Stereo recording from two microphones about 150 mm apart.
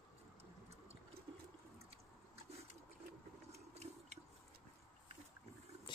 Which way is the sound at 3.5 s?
45° right (ahead or behind).